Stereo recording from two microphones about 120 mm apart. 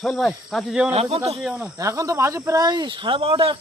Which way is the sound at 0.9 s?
55° right (ahead or behind).